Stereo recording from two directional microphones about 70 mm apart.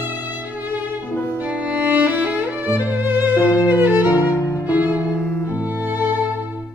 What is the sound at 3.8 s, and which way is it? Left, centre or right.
Violin, right.